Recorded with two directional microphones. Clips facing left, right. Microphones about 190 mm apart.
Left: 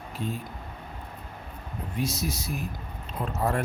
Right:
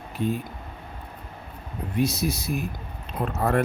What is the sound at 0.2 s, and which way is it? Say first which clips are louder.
Speech: right 7 dB; 60° right (ahead or behind).